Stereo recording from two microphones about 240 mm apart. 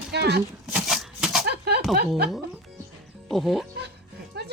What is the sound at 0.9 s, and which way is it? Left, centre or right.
Shuffling cards, centre.